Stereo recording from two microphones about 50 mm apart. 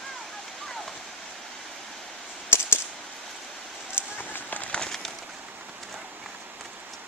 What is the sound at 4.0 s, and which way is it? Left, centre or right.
Run, left.